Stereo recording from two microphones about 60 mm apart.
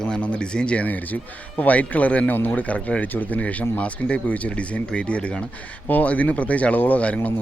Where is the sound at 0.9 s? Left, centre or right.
Left.